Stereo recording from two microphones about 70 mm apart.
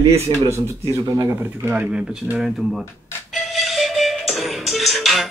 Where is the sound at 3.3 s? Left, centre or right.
Centre.